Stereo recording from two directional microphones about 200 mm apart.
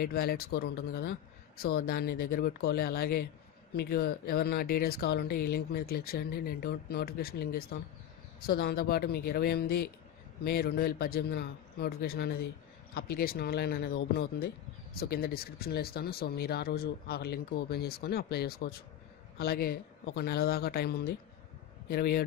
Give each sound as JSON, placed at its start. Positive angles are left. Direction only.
{"t": 0.0, "sound": "speech", "side_deg": 50}